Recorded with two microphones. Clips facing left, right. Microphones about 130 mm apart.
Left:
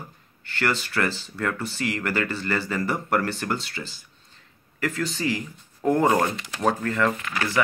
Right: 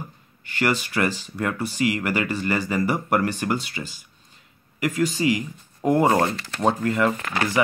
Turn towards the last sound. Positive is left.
turn(degrees=-20)  # may be behind; listen again after turning